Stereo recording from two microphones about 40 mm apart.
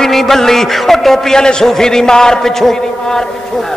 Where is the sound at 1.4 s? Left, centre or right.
Centre.